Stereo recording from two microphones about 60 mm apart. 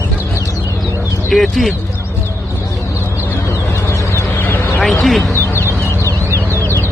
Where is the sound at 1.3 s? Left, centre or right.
Centre.